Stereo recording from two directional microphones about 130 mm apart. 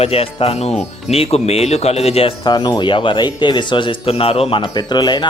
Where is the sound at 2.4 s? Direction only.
35° left (ahead or behind).